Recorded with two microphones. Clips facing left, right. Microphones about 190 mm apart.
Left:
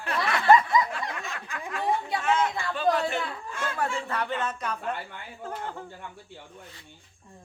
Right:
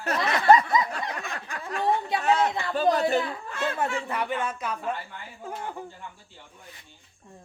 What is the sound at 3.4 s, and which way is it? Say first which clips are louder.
Speech: right 4 dB; 65° right (ahead or behind).